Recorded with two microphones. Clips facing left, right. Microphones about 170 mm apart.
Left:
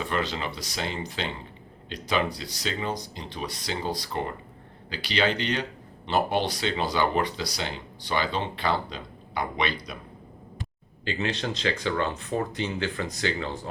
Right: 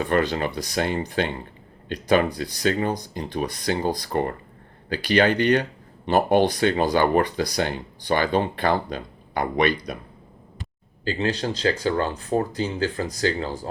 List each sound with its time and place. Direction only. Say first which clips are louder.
0.0 s speech: right 7 dB; 55° right (ahead or behind)
11.0 s speech: right 5 dB; 35° right (ahead or behind)